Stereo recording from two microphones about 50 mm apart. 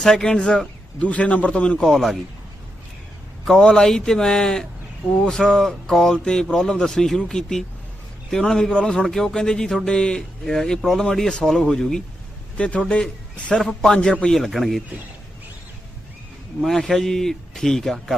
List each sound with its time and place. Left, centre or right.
0.0 s speech: centre
0.9 s a man's voice: left
1.8 s speech: centre
3.6 s speech: centre
12.5 s a man's voice: left
13.6 s speech: centre
14.3 s a man's voice: centre
16.6 s speech: centre